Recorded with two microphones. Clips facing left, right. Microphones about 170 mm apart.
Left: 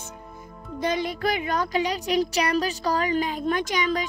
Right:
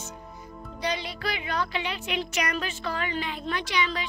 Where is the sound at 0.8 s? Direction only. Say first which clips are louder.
Left 6 dB; 50° left (ahead or behind).